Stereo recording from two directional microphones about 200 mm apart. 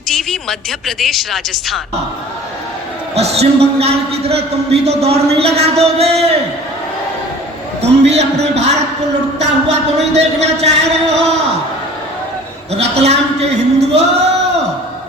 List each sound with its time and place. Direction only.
0.1 s speech: centre (ahead or behind)
3.2 s a man's voice: 30° right (ahead or behind)
7.8 s a man's voice: 30° right (ahead or behind)
12.7 s a man's voice: 30° right (ahead or behind)